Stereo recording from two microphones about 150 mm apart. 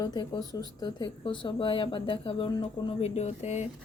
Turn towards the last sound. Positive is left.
turn(degrees=50)  # may be behind; listen again after turning